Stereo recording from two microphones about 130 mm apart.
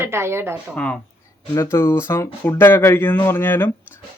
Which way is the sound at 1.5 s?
20° left (ahead or behind).